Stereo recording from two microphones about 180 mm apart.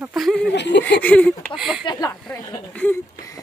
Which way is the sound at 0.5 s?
70° left (ahead or behind).